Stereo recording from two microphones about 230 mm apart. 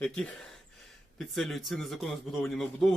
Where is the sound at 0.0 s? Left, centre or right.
Centre.